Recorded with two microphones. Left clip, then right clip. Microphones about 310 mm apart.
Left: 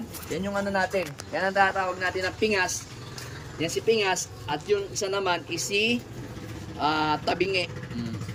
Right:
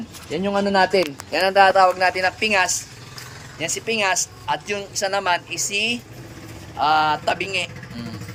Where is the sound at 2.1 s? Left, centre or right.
Centre.